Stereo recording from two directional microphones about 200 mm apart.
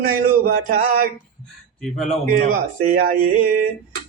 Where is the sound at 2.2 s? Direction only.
45° right (ahead or behind).